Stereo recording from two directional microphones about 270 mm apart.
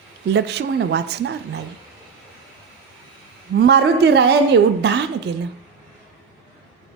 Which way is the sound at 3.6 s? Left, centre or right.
Right.